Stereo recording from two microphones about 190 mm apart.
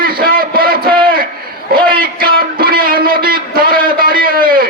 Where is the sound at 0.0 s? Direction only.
50° right (ahead or behind).